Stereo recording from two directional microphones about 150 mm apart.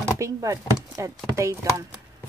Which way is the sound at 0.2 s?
20° right (ahead or behind).